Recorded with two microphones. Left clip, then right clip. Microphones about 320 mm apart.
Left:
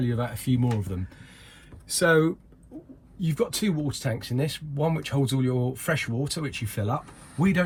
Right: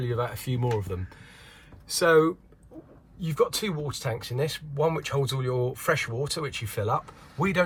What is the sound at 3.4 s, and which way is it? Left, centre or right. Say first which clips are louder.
Speech: right 2 dB; right.